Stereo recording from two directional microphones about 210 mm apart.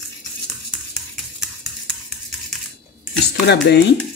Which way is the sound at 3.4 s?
55° left (ahead or behind).